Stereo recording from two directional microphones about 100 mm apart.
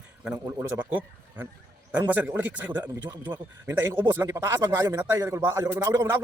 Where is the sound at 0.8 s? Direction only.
20° right (ahead or behind).